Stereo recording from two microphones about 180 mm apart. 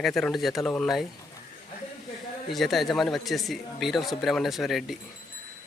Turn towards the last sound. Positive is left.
turn(degrees=0)  # may be behind; listen again after turning